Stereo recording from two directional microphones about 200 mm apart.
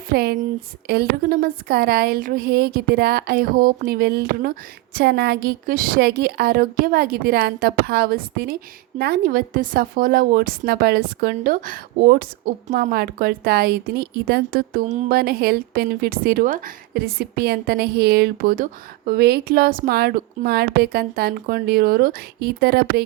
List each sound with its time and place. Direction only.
0.1 s a woman's voice: 50° right (ahead or behind)